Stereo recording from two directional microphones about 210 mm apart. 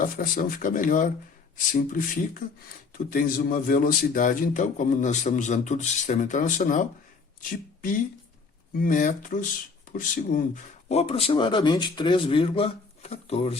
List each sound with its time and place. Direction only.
0.0 s a man's voice: 40° left (ahead or behind)
8.8 s a man's voice: 40° left (ahead or behind)